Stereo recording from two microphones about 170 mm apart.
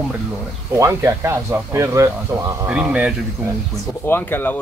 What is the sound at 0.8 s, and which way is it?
Speech, 15° right (ahead or behind).